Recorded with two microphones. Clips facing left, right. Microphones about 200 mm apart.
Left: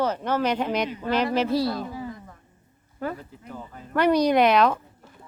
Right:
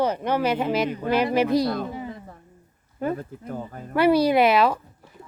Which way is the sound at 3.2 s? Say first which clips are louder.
Right 7 dB; 50° right (ahead or behind).